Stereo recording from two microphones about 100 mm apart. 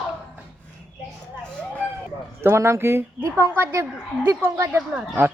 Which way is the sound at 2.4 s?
25° right (ahead or behind).